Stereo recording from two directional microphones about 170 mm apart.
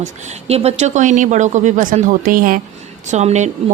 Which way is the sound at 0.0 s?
45° right (ahead or behind).